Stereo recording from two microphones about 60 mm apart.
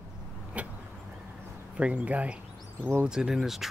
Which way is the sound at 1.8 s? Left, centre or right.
Right.